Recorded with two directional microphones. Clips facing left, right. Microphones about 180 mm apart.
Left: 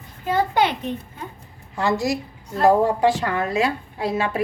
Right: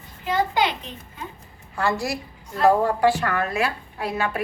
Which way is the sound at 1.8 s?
20° left (ahead or behind).